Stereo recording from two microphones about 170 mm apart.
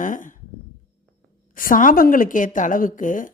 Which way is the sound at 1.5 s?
55° left (ahead or behind).